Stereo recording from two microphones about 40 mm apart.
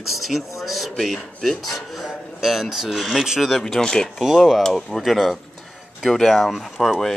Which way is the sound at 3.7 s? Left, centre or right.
Centre.